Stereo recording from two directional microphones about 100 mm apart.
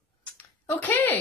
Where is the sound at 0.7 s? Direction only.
15° left (ahead or behind).